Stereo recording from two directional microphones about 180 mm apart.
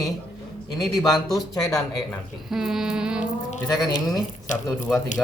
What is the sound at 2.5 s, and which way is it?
Speech, centre (ahead or behind).